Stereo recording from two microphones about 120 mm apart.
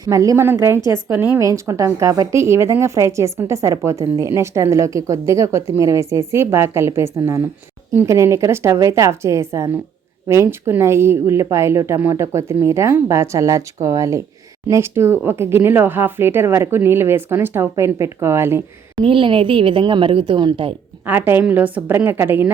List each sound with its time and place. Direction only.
0.0 s a woman's voice: 30° right (ahead or behind)
1.4 s speech: 25° right (ahead or behind)
19.0 s a woman's voice: 45° right (ahead or behind)
21.1 s a woman's voice: 15° right (ahead or behind)